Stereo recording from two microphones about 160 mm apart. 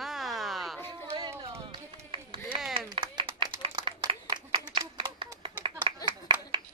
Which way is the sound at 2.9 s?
30° right (ahead or behind).